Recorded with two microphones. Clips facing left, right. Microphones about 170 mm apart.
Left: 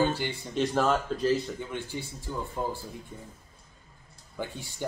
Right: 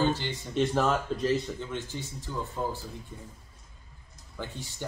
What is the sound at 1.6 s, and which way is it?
Speech, 10° left (ahead or behind).